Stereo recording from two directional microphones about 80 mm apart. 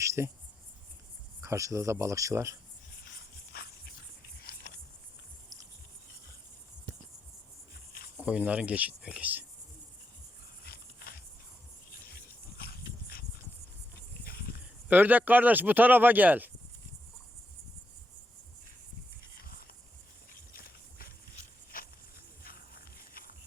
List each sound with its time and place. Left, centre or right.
0.0 s cricket: right
1.4 s speech: right
8.2 s speech: centre
14.6 s speech: right